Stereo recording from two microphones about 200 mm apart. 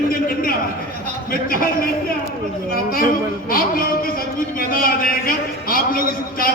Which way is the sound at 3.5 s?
45° left (ahead or behind).